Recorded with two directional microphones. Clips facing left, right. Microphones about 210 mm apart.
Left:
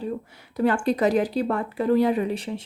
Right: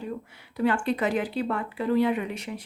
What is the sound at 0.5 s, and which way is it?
Speech, 40° left (ahead or behind).